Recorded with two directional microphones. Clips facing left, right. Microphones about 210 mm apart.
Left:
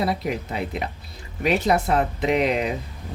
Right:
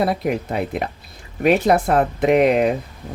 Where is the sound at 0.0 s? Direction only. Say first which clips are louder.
Right 4 dB; 55° right (ahead or behind).